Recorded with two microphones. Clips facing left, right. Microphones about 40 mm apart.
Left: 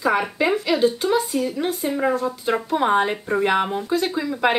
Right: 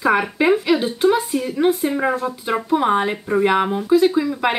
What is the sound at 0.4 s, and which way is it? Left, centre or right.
Speech, centre.